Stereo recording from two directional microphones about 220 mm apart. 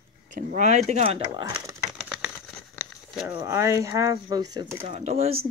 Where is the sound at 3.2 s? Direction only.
15° right (ahead or behind).